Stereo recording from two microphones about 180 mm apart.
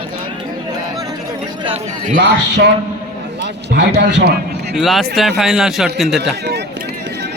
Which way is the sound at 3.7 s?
70° right (ahead or behind).